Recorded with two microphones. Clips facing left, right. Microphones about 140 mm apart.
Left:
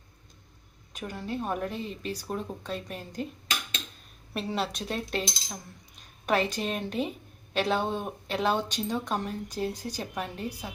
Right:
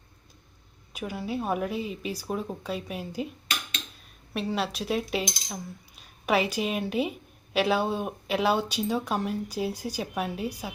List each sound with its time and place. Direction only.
0.9 s speech: 10° right (ahead or behind)
4.4 s cutlery: centre (ahead or behind)
6.2 s speech: 10° right (ahead or behind)